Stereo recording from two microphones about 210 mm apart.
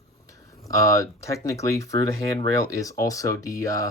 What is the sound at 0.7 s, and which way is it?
Speech, 15° left (ahead or behind).